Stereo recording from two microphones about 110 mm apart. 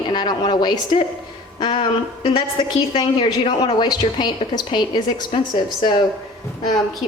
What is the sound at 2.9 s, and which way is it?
A woman's voice, 55° left (ahead or behind).